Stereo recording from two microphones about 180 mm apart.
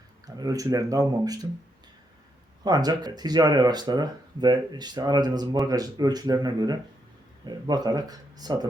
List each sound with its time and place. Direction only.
0.3 s speech: 20° right (ahead or behind)
2.6 s speech: 20° right (ahead or behind)